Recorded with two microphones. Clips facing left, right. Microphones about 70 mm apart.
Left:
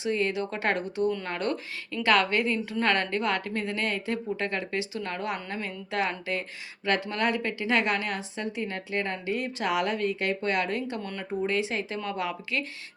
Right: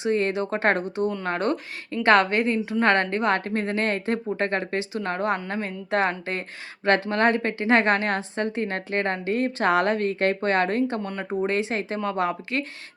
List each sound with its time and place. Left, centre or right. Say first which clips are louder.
0.0 s a woman's voice: right 4 dB; right